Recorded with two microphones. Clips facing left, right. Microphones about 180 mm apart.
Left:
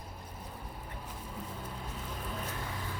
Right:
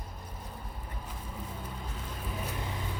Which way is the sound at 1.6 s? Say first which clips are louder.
Even; centre (ahead or behind).